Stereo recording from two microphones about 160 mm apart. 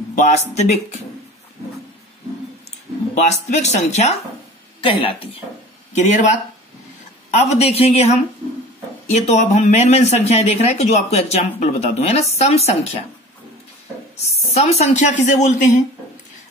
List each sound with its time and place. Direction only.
0.1 s speech: 45° left (ahead or behind)
3.2 s speech: 45° left (ahead or behind)
5.9 s speech: 45° left (ahead or behind)
14.2 s speech: 40° left (ahead or behind)